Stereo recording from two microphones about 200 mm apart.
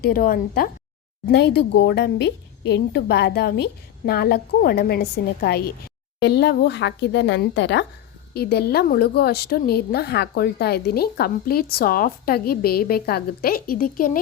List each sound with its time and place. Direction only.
0.0 s a woman's voice: 45° left (ahead or behind)
1.3 s a woman's voice: 55° left (ahead or behind)